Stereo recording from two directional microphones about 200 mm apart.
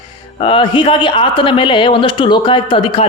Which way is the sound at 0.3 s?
25° left (ahead or behind).